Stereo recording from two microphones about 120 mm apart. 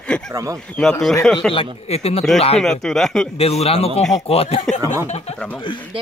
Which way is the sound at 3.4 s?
55° left (ahead or behind).